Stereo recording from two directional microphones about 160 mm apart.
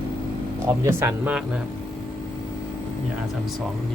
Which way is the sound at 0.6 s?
15° right (ahead or behind).